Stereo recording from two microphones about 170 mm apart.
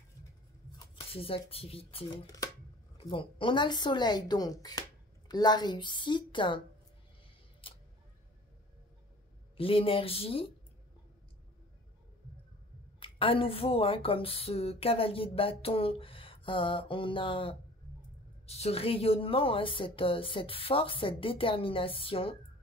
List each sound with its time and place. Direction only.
0.9 s speech: 35° left (ahead or behind)
7.6 s a sound: 30° left (ahead or behind)
9.6 s speech: 35° left (ahead or behind)
13.0 s speech: 30° left (ahead or behind)